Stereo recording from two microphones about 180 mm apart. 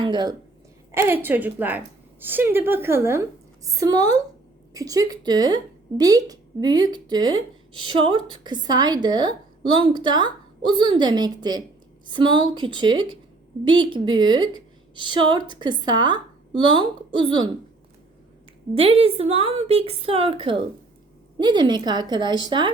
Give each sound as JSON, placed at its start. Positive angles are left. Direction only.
{"t": 0.0, "sound": "a woman's voice", "side_deg": -25}
{"t": 0.9, "sound": "a woman's voice", "side_deg": -10}
{"t": 18.7, "sound": "a woman's voice", "side_deg": -30}